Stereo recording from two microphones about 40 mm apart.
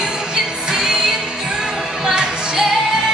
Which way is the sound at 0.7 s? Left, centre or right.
Centre.